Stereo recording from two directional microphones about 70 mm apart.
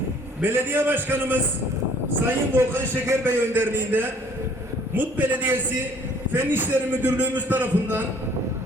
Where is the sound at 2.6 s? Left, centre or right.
Right.